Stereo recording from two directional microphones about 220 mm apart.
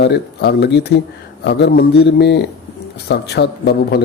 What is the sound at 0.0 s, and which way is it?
Speech, 50° left (ahead or behind).